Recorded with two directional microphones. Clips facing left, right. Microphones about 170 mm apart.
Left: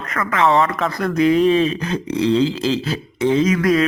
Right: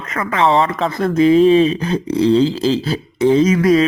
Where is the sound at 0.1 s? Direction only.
25° right (ahead or behind).